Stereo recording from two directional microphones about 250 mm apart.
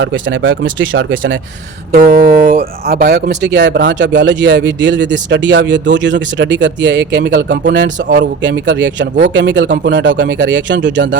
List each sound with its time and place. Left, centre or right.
0.0 s speech: right
1.9 s speech: right